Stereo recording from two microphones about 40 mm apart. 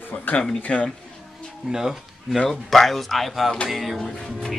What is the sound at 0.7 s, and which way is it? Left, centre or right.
Speech, left.